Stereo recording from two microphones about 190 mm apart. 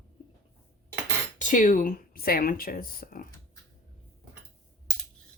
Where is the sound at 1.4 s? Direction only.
40° left (ahead or behind).